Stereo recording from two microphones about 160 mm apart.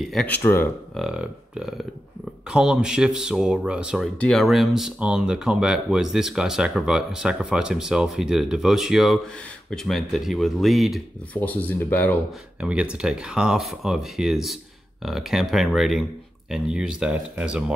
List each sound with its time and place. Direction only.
0.1 s speech: centre (ahead or behind)
0.4 s speech: 15° left (ahead or behind)
0.9 s speech: 5° right (ahead or behind)
11.3 s speech: 10° left (ahead or behind)
12.5 s speech: 5° right (ahead or behind)